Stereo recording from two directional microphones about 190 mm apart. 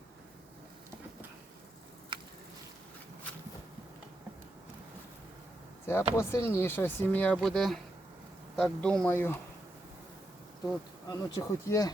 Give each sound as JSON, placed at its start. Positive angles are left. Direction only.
{"t": 5.8, "sound": "speech", "side_deg": 15}
{"t": 11.1, "sound": "speech", "side_deg": 20}